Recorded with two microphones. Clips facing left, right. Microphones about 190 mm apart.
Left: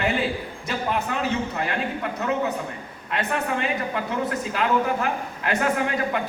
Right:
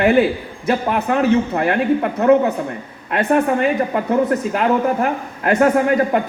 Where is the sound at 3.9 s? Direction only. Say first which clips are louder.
Right 9 dB; 45° right (ahead or behind).